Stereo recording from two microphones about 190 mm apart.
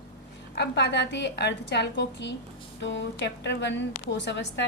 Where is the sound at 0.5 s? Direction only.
60° left (ahead or behind).